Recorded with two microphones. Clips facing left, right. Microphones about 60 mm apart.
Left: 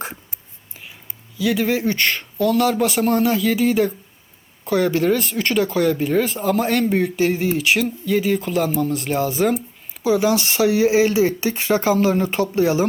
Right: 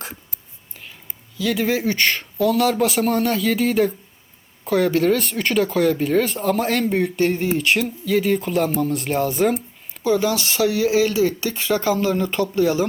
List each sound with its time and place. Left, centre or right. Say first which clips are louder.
1.4 s speech: left 1 dB; centre
10.0 s speech: left 2 dB; centre